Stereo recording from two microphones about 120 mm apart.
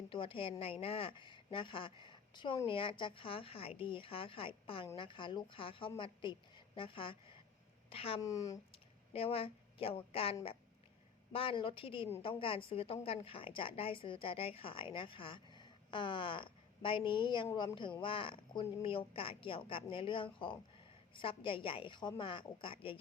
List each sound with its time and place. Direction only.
0.1 s a woman's voice: 45° left (ahead or behind)
8.2 s speech: 30° left (ahead or behind)
9.1 s a woman's voice: 55° left (ahead or behind)